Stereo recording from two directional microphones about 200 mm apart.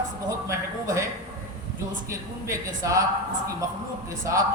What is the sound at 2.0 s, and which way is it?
Speech, 15° right (ahead or behind).